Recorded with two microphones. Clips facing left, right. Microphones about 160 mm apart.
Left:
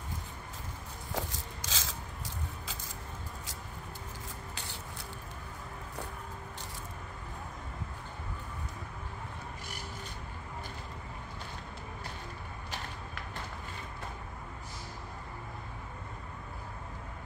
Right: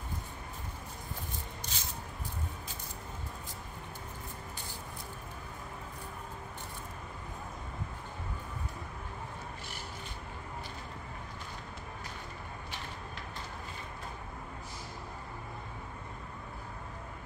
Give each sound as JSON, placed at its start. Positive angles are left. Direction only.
{"t": 1.1, "sound": "scissors", "side_deg": 90}